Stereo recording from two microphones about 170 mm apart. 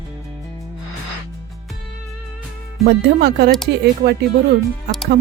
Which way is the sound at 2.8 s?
70° right (ahead or behind).